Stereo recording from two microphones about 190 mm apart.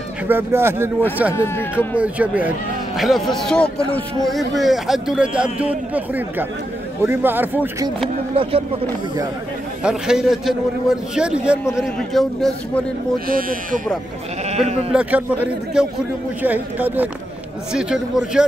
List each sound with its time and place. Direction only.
0.3 s a man's voice: 10° right (ahead or behind)
1.3 s speech: 10° left (ahead or behind)
2.0 s a man's voice: 5° right (ahead or behind)
8.4 s speech: 30° right (ahead or behind)
9.8 s speech: 5° right (ahead or behind)
13.3 s speech: 50° right (ahead or behind)
14.5 s speech: 35° right (ahead or behind)
14.9 s a man's voice: 5° right (ahead or behind)